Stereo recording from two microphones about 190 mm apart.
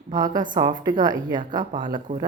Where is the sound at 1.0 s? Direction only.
20° right (ahead or behind).